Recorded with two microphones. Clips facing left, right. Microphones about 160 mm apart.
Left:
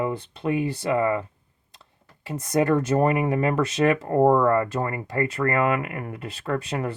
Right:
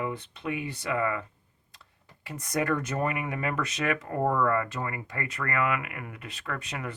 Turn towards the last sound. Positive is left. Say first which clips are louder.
# left 9 dB
turn(degrees=35)  # may be behind; listen again after turning